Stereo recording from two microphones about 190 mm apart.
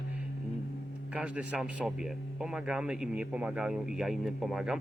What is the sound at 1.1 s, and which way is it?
A man's voice, 5° right (ahead or behind).